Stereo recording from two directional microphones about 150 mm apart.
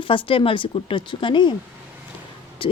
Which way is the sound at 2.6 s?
35° left (ahead or behind).